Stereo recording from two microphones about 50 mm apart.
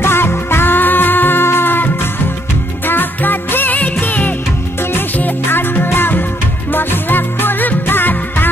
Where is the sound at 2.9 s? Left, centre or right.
Left.